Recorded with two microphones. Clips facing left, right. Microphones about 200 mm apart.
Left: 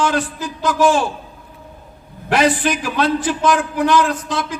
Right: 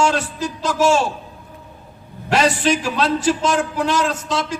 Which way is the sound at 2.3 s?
55° left (ahead or behind).